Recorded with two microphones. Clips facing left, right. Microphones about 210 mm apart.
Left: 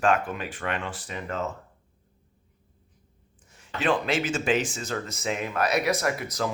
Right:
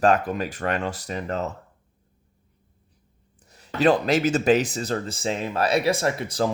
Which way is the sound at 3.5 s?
35° right (ahead or behind).